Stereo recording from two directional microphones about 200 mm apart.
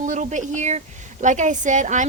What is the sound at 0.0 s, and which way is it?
A woman's voice, 40° right (ahead or behind).